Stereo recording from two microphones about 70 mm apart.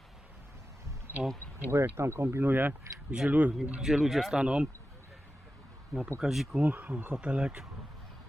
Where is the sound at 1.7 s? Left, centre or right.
Right.